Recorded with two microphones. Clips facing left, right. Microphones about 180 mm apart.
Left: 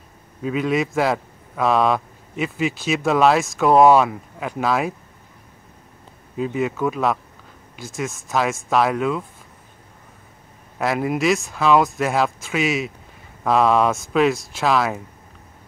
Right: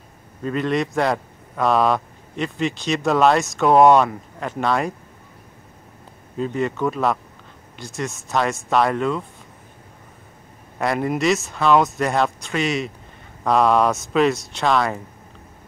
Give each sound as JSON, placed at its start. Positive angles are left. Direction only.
{"t": 0.4, "sound": "a man's voice", "side_deg": 5}
{"t": 6.3, "sound": "a man's voice", "side_deg": 5}
{"t": 10.8, "sound": "a man's voice", "side_deg": 0}